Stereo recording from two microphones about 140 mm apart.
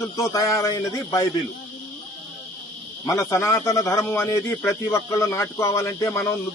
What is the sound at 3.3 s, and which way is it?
Speech, 20° left (ahead or behind).